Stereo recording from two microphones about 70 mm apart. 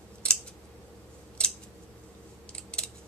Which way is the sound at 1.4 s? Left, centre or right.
Centre.